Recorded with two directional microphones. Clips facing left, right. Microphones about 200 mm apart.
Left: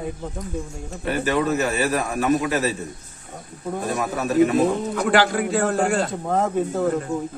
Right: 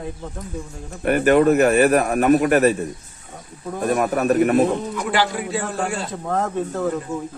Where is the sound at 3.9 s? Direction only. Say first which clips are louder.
Right 6 dB; 60° right (ahead or behind).